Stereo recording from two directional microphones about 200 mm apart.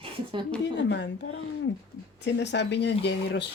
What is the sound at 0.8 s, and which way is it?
Speech, 60° left (ahead or behind).